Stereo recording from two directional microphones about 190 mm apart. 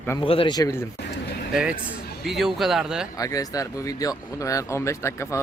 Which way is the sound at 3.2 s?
20° left (ahead or behind).